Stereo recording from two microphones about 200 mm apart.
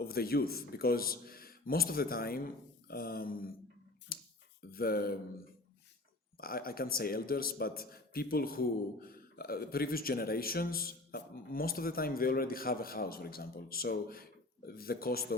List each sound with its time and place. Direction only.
0.0 s a man's voice: 50° left (ahead or behind)
4.1 s a sound: 50° left (ahead or behind)
4.7 s speech: 50° left (ahead or behind)
6.3 s a man's voice: 45° left (ahead or behind)